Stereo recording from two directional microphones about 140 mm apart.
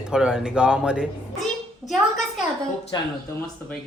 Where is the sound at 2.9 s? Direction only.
35° left (ahead or behind).